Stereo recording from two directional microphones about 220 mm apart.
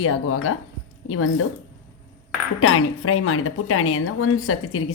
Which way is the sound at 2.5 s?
75° left (ahead or behind).